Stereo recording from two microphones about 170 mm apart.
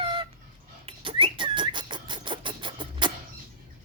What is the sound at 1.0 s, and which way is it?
Whistling, 30° right (ahead or behind).